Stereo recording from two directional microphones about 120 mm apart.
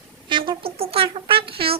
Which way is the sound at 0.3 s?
45° right (ahead or behind).